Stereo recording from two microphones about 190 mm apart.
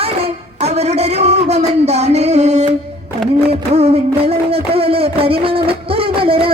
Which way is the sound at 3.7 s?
35° right (ahead or behind).